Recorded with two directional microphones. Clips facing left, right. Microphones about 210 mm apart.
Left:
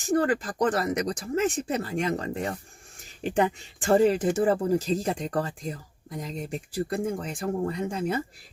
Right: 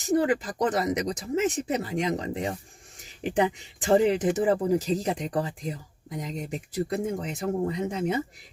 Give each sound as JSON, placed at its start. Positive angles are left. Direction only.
{"t": 0.0, "sound": "speech", "side_deg": -15}